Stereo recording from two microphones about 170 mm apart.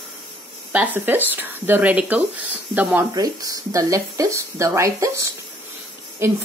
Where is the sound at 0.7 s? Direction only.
10° right (ahead or behind).